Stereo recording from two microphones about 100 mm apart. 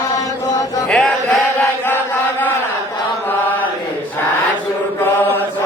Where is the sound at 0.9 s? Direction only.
10° left (ahead or behind).